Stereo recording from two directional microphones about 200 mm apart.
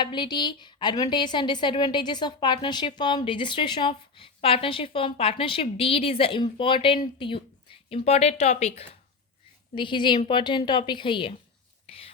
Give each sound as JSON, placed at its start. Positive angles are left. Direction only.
{"t": 0.0, "sound": "a woman's voice", "side_deg": 20}
{"t": 11.9, "sound": "whispering", "side_deg": 30}